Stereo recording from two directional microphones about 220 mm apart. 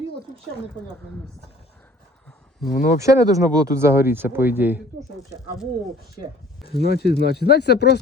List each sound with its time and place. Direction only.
2.6 s speech: 40° left (ahead or behind)
3.0 s speech: 15° right (ahead or behind)
6.8 s speech: 45° left (ahead or behind)